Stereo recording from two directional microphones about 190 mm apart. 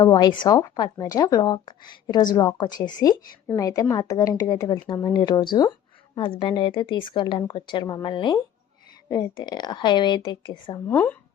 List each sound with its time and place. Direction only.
0.0 s speech: 20° left (ahead or behind)
10.8 s speech: 10° left (ahead or behind)